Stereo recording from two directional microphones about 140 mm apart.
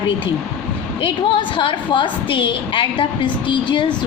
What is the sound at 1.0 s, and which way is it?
A woman's voice, 35° left (ahead or behind).